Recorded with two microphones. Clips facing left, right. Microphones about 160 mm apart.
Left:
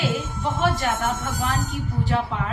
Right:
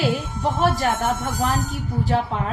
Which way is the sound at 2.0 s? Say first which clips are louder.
Right 3 dB; 35° right (ahead or behind).